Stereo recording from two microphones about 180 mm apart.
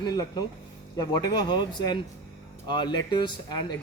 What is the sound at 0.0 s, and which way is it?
Speech, 20° left (ahead or behind).